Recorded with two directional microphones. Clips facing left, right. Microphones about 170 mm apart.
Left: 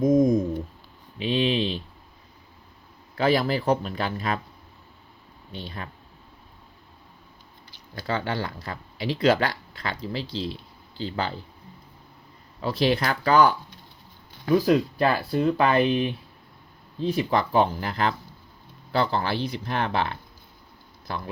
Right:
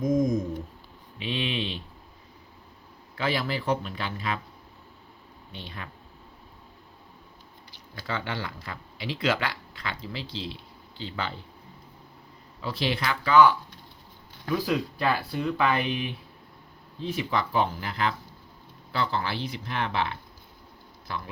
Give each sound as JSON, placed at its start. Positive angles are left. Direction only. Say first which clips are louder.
{"t": 0.0, "sound": "speech", "louder": "left 5 dB", "side_deg": 30}
{"t": 3.2, "sound": "speech", "louder": "left 6 dB", "side_deg": 40}
{"t": 5.5, "sound": "speech", "louder": "left 5 dB", "side_deg": 40}
{"t": 7.9, "sound": "speech", "louder": "left 5 dB", "side_deg": 40}
{"t": 12.6, "sound": "speech", "louder": "left 6 dB", "side_deg": 40}
{"t": 14.7, "sound": "speech", "louder": "left 5 dB", "side_deg": 45}